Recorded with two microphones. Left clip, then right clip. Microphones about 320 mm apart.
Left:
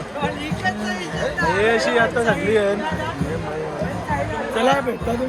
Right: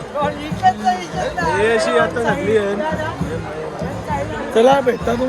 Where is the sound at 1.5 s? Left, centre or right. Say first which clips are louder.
Right 3 dB; centre.